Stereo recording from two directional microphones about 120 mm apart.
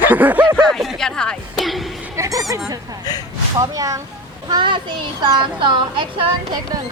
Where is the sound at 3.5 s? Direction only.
30° right (ahead or behind).